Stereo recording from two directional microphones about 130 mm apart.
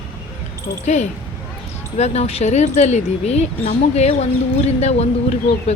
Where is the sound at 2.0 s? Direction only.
55° left (ahead or behind).